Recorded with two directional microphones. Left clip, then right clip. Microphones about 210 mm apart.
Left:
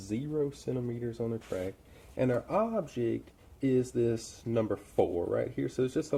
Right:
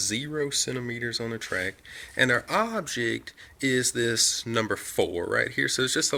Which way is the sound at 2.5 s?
50° right (ahead or behind).